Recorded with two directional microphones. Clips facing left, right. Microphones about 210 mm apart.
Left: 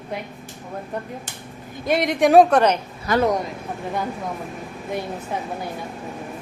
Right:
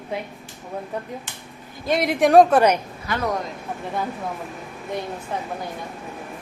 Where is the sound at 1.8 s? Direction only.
Centre (ahead or behind).